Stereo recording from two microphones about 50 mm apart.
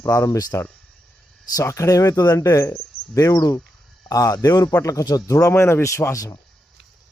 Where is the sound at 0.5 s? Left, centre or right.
Left.